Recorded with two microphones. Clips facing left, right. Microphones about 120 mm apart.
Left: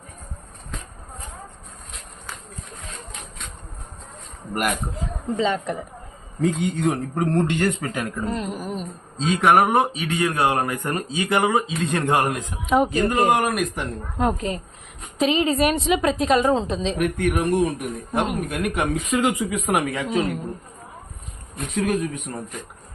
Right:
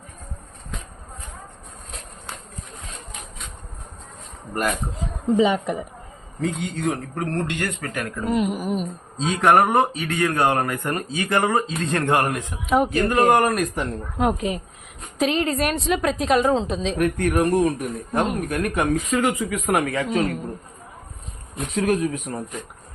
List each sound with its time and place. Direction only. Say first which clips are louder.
5.4 s speech: right 2 dB; 15° right (ahead or behind)
6.6 s speech: left 3 dB; 20° left (ahead or behind)
8.2 s speech: right 4 dB; 10° right (ahead or behind)
9.2 s a woman's voice: even; centre (ahead or behind)
10.2 s speech: right 1 dB; 15° left (ahead or behind)
11.3 s a woman's voice: even; 5° left (ahead or behind)
12.6 s a woman's voice: left 1 dB; centre (ahead or behind)
13.2 s a woman's voice: right 2 dB; 10° left (ahead or behind)
14.3 s speech: right 1 dB; 15° right (ahead or behind)
15.2 s a woman's voice: left 2 dB; centre (ahead or behind)
18.7 s speech: right 2 dB; 15° left (ahead or behind)
20.1 s a woman's voice: even; centre (ahead or behind)
21.5 s a woman's voice: right 1 dB; centre (ahead or behind)